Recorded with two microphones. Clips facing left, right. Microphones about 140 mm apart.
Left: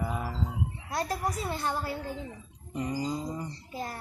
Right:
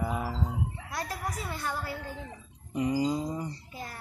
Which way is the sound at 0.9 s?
30° left (ahead or behind).